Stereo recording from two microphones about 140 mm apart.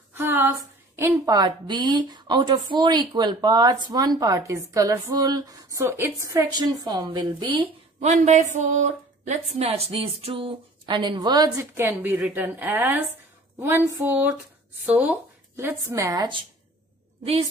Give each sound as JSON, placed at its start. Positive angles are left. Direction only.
{"t": 0.1, "sound": "a woman's voice", "side_deg": -15}
{"t": 8.0, "sound": "speech", "side_deg": -55}
{"t": 8.5, "sound": "a sound", "side_deg": -60}
{"t": 9.6, "sound": "a woman's voice", "side_deg": -45}
{"t": 11.7, "sound": "a woman's voice", "side_deg": -15}
{"t": 17.2, "sound": "a woman's voice", "side_deg": -45}